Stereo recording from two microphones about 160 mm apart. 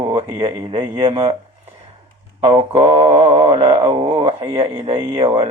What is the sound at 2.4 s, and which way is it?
Speech, 30° right (ahead or behind).